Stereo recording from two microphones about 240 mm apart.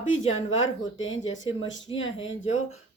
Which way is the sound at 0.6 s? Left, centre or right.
Left.